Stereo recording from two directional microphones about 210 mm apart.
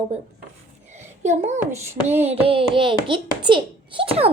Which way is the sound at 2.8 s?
25° right (ahead or behind).